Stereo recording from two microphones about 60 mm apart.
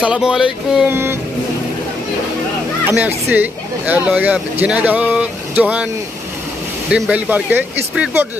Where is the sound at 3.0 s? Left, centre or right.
Right.